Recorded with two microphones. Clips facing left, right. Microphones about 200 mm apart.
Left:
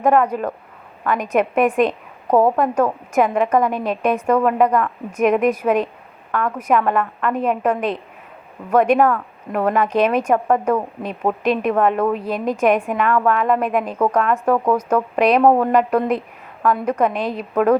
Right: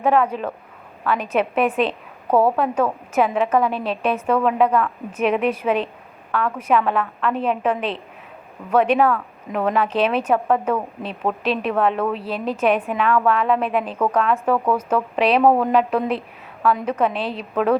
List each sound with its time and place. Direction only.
0.0 s a woman's voice: 15° left (ahead or behind)